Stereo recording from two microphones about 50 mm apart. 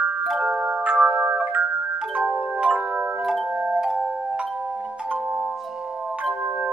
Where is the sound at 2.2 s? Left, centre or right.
Centre.